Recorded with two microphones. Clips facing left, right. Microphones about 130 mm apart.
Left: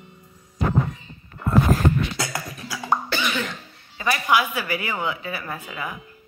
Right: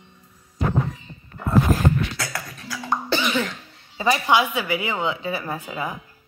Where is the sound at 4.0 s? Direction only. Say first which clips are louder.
Right 2 dB; 25° right (ahead or behind).